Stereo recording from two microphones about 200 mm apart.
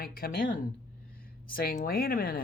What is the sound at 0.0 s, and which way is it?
Speech, 45° left (ahead or behind).